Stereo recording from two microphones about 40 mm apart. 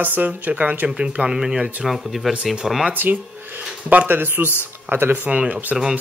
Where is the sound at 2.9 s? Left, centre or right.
Right.